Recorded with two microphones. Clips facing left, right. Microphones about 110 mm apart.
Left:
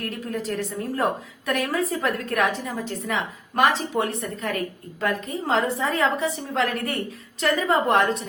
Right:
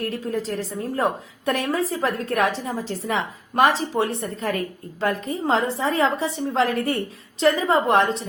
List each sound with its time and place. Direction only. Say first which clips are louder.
0.0 s a woman's voice: right 3 dB; 30° right (ahead or behind)